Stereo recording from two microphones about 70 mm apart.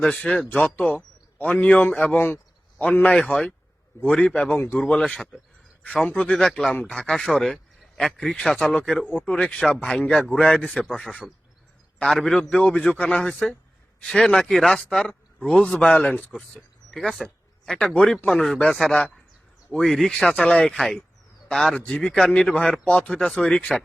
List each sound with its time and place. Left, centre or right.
0.0 s a man's voice: centre
3.1 s a man's voice: centre
4.5 s speech: left
4.8 s a man's voice: centre
6.3 s a man's voice: centre
17.2 s a sound: centre
17.9 s a man's voice: centre